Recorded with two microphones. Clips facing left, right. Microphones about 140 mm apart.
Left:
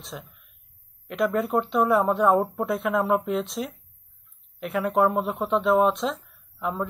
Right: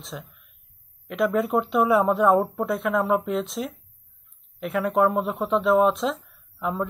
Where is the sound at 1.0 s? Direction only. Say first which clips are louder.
Right 1 dB; centre (ahead or behind).